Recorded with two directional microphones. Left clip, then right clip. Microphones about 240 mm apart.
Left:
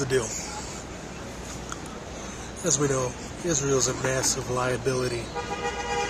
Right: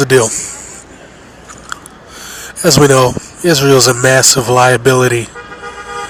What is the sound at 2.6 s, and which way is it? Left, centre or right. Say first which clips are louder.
Speech: right 18 dB; right.